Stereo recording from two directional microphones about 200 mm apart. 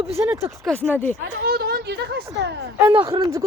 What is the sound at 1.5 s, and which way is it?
Speech, 50° right (ahead or behind).